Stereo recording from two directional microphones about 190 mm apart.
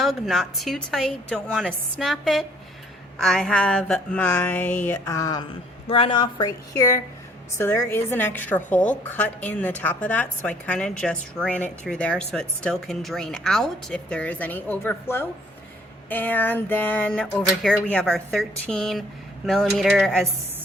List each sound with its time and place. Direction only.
0.0 s a woman's voice: centre (ahead or behind)